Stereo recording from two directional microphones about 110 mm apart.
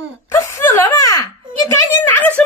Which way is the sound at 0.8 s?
35° left (ahead or behind).